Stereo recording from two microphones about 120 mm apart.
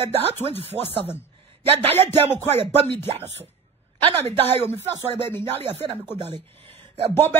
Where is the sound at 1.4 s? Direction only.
55° right (ahead or behind).